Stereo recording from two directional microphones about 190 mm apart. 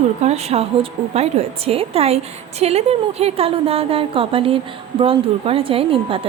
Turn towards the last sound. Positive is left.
turn(degrees=-30)  # may be behind; listen again after turning